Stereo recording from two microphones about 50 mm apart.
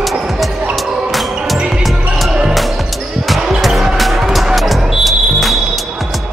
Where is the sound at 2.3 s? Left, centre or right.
Centre.